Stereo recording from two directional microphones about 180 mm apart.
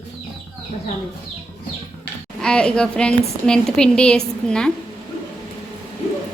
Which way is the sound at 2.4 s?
5° left (ahead or behind).